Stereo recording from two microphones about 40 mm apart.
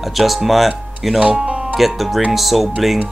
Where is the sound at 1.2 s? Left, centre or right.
Right.